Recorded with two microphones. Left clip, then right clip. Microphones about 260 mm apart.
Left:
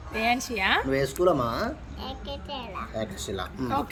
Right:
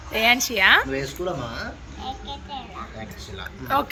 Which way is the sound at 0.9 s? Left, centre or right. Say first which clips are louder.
Left 4 dB; left.